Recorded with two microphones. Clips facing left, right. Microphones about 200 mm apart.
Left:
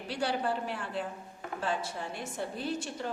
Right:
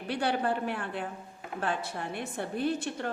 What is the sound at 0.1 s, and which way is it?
A woman's voice, 55° right (ahead or behind).